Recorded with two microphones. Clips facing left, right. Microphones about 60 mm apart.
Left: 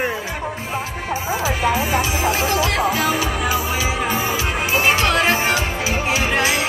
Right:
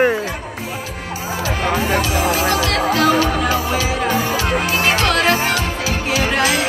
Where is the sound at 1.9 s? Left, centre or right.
Left.